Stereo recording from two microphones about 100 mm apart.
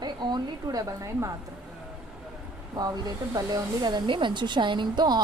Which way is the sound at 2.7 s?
40° right (ahead or behind).